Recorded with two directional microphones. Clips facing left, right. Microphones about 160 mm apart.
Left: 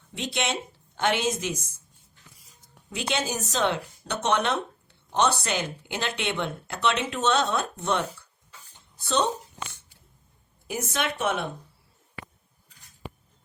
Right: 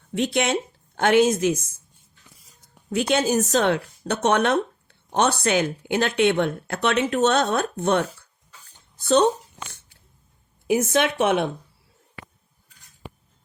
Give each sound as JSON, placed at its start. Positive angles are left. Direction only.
{"t": 0.1, "sound": "speech", "side_deg": -50}
{"t": 2.9, "sound": "speech", "side_deg": -45}
{"t": 10.7, "sound": "speech", "side_deg": -70}